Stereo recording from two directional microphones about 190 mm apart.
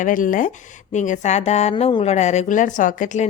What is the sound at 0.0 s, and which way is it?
A woman's voice, 45° left (ahead or behind).